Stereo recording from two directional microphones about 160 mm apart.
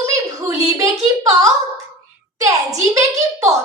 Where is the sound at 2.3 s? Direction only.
20° right (ahead or behind).